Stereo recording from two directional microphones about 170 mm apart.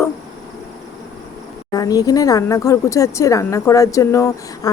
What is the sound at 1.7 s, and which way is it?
Speech, 20° left (ahead or behind).